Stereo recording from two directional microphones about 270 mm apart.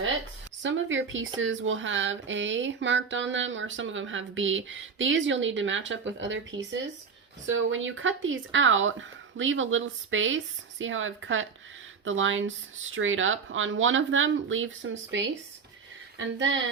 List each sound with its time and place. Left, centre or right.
0.6 s speech: right
7.4 s speech: right